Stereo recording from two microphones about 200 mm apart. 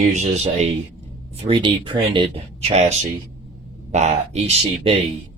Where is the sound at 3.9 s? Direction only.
35° right (ahead or behind).